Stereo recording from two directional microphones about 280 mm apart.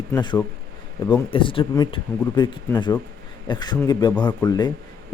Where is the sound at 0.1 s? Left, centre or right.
Centre.